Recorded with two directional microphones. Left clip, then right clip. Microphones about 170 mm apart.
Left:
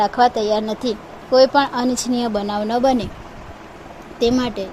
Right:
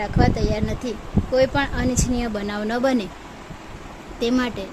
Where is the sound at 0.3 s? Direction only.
15° left (ahead or behind).